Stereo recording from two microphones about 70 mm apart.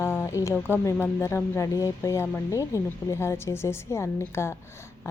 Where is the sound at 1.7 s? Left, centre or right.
Left.